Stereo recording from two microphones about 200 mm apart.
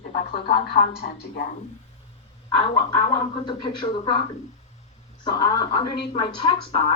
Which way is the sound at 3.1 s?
25° left (ahead or behind).